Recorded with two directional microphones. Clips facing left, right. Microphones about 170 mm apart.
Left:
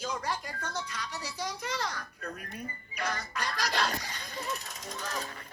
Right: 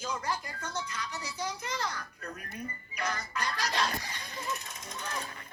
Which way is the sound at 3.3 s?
35° left (ahead or behind).